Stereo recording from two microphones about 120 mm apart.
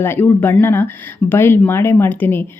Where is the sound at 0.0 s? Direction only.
20° left (ahead or behind).